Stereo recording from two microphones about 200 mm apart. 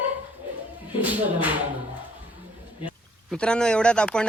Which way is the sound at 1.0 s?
10° right (ahead or behind).